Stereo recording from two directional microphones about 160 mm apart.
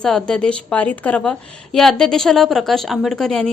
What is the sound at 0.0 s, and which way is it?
A woman's voice, 5° left (ahead or behind).